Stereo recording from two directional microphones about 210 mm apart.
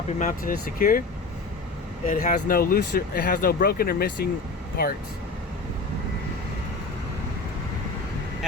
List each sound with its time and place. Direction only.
0.2 s speech: 40° left (ahead or behind)
2.0 s speech: 40° left (ahead or behind)